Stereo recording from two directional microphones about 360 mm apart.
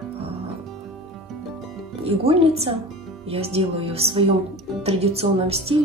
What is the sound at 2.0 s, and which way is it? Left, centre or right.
Speech, centre.